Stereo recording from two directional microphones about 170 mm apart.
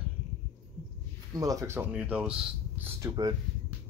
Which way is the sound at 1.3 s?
20° right (ahead or behind).